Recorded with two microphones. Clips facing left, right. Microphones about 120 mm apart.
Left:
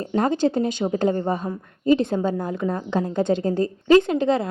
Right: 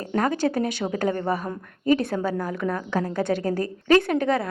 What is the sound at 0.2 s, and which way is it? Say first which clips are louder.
A woman's voice: left 3 dB; 25° left (ahead or behind).